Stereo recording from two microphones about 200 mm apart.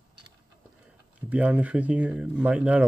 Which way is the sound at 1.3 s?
5° right (ahead or behind).